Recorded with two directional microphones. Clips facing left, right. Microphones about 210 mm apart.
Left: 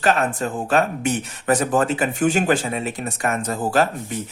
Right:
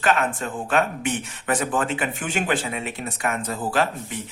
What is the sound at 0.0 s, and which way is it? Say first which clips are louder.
Speech: left 3 dB; 40° left (ahead or behind).